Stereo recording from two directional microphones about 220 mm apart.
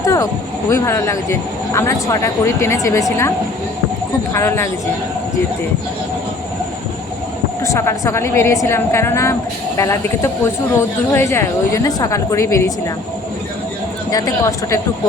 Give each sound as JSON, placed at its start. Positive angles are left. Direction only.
{"t": 0.0, "sound": "vehicle", "side_deg": 15}
{"t": 0.7, "sound": "speech", "side_deg": 15}
{"t": 7.6, "sound": "speech", "side_deg": 15}
{"t": 14.1, "sound": "speech", "side_deg": 15}